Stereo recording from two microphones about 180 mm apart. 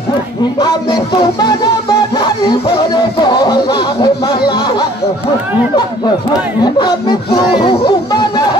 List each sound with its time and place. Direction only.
0.6 s speech: 25° left (ahead or behind)
6.6 s speech: 25° left (ahead or behind)